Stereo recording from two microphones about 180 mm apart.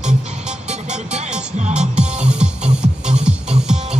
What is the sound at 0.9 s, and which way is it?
Music, 40° right (ahead or behind).